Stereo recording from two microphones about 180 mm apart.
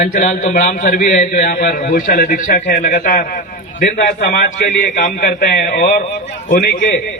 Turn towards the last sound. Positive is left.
turn(degrees=50)  # may be behind; listen again after turning